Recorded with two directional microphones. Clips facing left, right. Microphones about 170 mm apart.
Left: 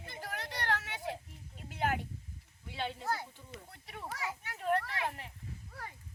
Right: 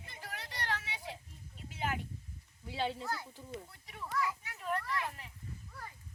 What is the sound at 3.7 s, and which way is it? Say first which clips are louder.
Children playing: right 1 dB; 50° left (ahead or behind).